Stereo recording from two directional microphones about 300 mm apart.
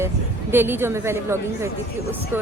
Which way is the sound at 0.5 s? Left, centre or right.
Centre.